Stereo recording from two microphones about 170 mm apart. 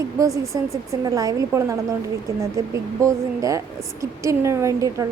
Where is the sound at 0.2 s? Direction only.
20° right (ahead or behind).